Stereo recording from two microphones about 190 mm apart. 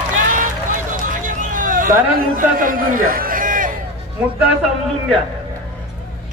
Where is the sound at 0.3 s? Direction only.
45° right (ahead or behind).